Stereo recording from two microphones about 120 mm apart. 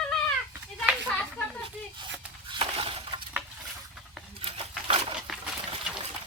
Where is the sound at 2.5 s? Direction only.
50° right (ahead or behind).